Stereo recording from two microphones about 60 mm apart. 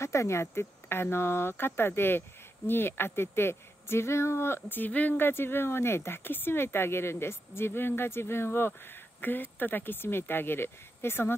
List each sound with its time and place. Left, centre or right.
0.0 s speech: left
4.6 s speech: left